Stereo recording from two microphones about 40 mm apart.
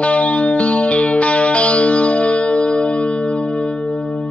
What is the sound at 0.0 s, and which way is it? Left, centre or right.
Music, left.